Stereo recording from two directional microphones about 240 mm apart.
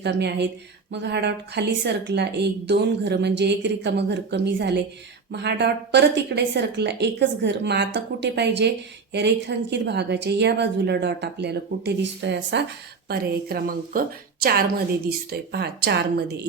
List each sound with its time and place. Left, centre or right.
0.0 s a woman's voice: right
15.3 s a woman's voice: right